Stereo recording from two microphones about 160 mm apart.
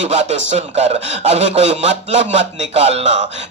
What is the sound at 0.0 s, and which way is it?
Speech, 45° right (ahead or behind).